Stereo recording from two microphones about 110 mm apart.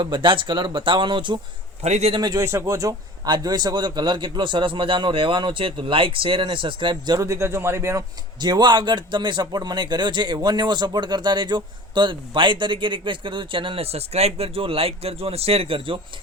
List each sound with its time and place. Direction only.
0.0 s speech: 45° right (ahead or behind)
1.8 s a man's voice: 80° right
2.1 s speech: 40° right (ahead or behind)
2.4 s speech: 25° right (ahead or behind); by 7.1 s 50° right (ahead or behind)
7.1 s a man's voice: 30° right (ahead or behind)
8.4 s speech: 40° right (ahead or behind); by 16.0 s 55° right (ahead or behind)